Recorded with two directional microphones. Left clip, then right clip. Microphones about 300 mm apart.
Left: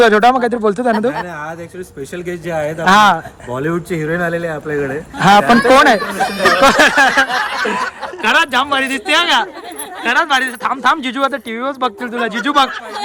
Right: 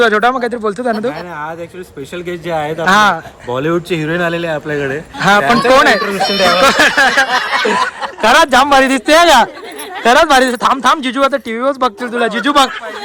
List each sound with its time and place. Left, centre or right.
0.0 s speech: centre
2.5 s speech: centre
3.5 s speech: centre
5.2 s speech: centre
8.2 s speech: centre